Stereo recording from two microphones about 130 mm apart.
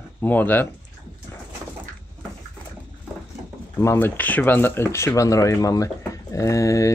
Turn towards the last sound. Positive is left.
turn(degrees=25)  # may be behind; listen again after turning